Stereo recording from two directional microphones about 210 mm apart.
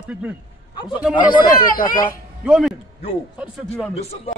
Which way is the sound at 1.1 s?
20° left (ahead or behind).